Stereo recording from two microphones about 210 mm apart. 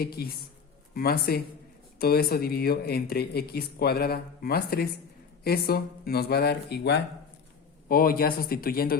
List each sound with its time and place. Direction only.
0.0 s speech: 45° left (ahead or behind)